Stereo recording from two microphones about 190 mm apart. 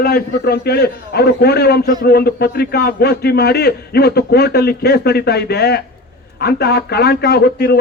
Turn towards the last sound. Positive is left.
turn(degrees=60)  # may be behind; listen again after turning